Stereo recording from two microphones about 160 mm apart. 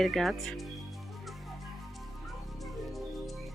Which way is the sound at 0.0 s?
Centre (ahead or behind).